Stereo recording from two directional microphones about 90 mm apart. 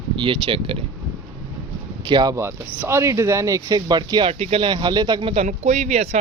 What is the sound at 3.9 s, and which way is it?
Speech, 55° right (ahead or behind).